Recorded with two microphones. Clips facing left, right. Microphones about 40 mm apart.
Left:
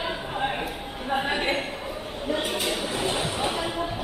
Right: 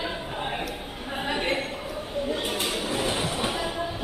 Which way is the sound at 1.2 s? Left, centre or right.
Left.